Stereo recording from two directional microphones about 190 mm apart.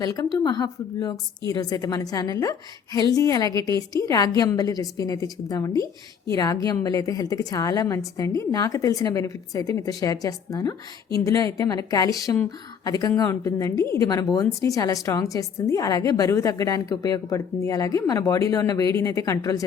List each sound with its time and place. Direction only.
0.0 s a woman's voice: 20° left (ahead or behind)